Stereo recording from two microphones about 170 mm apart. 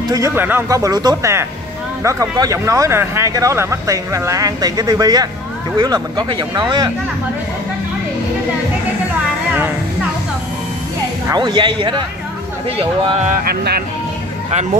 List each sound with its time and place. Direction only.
0.1 s speech: 15° right (ahead or behind)
11.2 s speech: 25° right (ahead or behind)
13.5 s speech: 65° right (ahead or behind)